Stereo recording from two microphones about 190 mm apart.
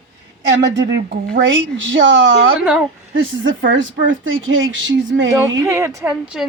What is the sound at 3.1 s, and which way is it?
A woman's voice, 90° right.